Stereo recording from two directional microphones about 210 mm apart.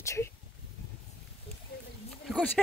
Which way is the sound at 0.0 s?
15° left (ahead or behind).